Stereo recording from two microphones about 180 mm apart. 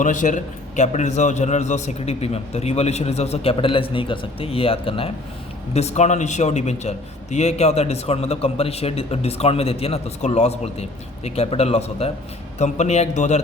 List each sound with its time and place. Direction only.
0.0 s a man's voice: 45° left (ahead or behind)